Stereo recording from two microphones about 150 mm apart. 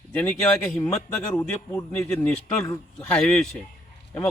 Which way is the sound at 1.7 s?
20° left (ahead or behind).